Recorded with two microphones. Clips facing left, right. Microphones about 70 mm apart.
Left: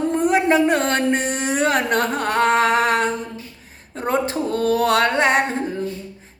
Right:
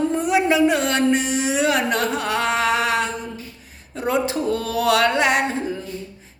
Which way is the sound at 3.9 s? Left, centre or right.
Left.